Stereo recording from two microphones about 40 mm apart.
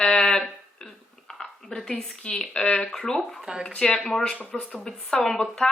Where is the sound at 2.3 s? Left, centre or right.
Left.